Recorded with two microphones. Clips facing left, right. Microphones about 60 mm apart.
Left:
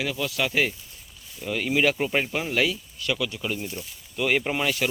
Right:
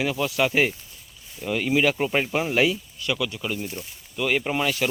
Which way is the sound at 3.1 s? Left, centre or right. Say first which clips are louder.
Right 1 dB; centre.